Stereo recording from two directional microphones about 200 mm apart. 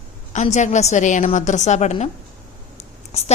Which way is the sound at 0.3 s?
35° left (ahead or behind).